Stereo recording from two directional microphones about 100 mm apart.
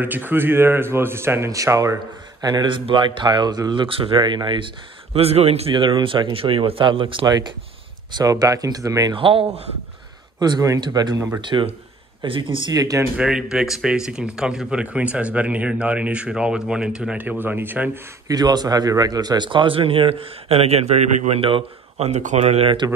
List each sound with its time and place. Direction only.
0.0 s speech: 20° right (ahead or behind)
2.4 s speech: 55° right (ahead or behind)
5.1 s speech: 90° right
5.8 s speech: 55° right (ahead or behind); by 9.1 s 35° right (ahead or behind)
9.1 s speech: 65° right (ahead or behind)
10.4 s speech: 40° right (ahead or behind)
11.4 s speech: 55° right (ahead or behind)
12.7 s speech: 35° right (ahead or behind)
13.1 s speech: 10° right (ahead or behind)
18.3 s speech: 40° right (ahead or behind); by 22.8 s 90° right